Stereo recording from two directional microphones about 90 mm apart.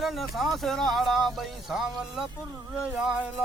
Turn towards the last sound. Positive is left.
turn(degrees=-10)  # may be behind; listen again after turning